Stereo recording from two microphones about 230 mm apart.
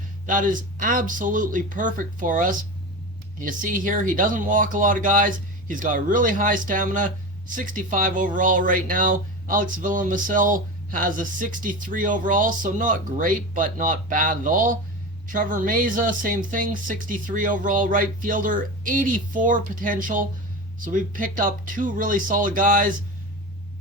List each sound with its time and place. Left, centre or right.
0.3 s speech: right